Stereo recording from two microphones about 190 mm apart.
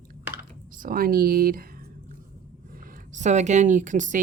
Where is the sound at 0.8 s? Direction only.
50° right (ahead or behind).